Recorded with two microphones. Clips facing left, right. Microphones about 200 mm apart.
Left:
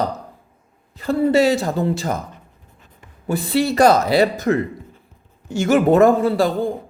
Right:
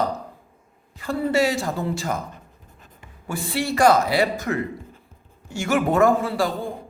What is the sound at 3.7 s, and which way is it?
Speech, 40° left (ahead or behind).